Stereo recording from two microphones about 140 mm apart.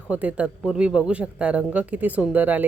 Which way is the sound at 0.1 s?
10° right (ahead or behind).